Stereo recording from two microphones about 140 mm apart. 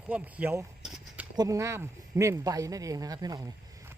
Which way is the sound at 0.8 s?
5° right (ahead or behind).